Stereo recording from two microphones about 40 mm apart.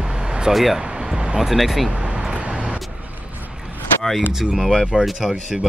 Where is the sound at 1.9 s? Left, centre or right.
Right.